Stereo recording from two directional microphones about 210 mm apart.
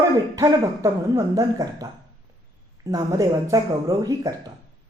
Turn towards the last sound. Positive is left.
turn(degrees=-15)  # may be behind; listen again after turning